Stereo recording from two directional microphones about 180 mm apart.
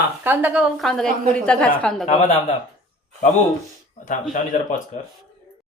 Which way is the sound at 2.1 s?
40° left (ahead or behind).